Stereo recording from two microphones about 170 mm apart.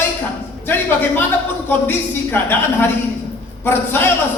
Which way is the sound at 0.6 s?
10° left (ahead or behind).